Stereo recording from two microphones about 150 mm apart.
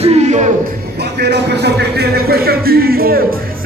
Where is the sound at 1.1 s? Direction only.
90° right.